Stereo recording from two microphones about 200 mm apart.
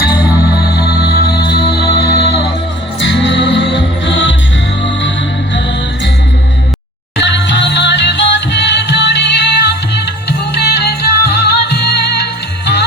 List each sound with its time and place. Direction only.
0.6 s music: 50° left (ahead or behind)
3.0 s music: 65° left (ahead or behind)
7.2 s music: 60° left (ahead or behind)